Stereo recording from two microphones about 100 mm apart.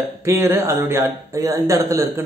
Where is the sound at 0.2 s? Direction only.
25° right (ahead or behind).